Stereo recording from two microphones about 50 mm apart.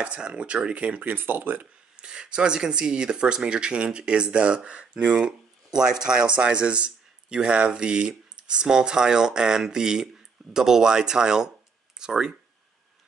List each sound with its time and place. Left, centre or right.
0.0 s speech: right
2.0 s speech: centre